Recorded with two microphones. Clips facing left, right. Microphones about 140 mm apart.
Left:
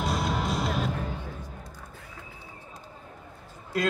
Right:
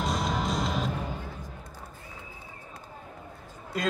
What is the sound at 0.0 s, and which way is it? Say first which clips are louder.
Music: left 1 dB; 5° left (ahead or behind).